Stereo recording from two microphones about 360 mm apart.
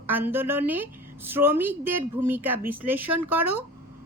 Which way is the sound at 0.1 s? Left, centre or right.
Centre.